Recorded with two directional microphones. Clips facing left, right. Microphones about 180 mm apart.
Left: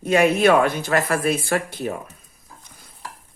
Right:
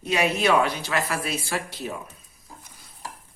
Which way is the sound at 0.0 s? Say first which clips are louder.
Left 7 dB; 50° left (ahead or behind).